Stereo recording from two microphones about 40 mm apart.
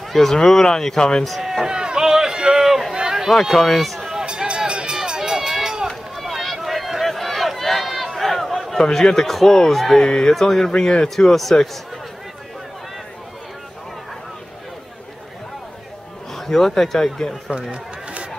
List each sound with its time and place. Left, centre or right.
0.1 s a man's voice: centre
1.2 s speech: centre
1.7 s run: right
3.3 s speech: centre
4.1 s run: centre
6.1 s run: centre
8.2 s a sound: centre
8.7 s a man's voice: centre
10.0 s speech: centre
10.4 s a man's voice: centre
10.8 s speech: centre
11.1 s speech: centre
16.3 s a man's voice: centre
17.5 s a sound: right